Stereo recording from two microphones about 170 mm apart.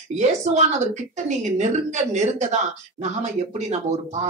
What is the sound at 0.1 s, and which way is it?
Speech, 40° right (ahead or behind).